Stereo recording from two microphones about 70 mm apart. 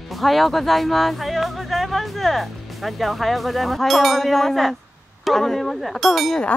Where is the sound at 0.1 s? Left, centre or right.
Centre.